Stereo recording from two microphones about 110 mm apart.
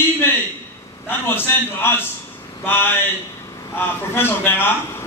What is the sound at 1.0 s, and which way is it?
A man's voice, 20° left (ahead or behind).